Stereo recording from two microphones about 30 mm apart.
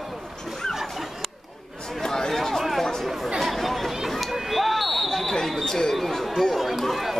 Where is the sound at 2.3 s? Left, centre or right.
Centre.